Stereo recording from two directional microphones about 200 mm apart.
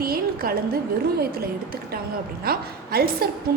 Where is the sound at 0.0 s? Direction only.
50° right (ahead or behind).